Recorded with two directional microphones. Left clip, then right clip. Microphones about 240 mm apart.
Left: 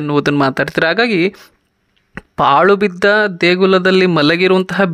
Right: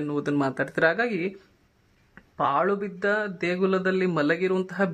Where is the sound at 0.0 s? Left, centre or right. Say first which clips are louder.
Left 12 dB; left.